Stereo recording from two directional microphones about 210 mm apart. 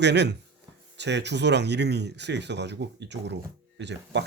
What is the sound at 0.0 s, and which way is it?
Speech, 55° right (ahead or behind).